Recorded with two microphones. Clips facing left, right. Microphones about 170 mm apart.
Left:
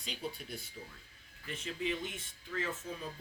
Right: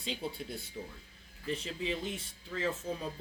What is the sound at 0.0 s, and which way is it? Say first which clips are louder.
Speech: right 4 dB; 25° right (ahead or behind).